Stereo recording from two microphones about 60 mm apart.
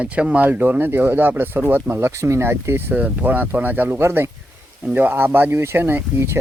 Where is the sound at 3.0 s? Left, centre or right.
Right.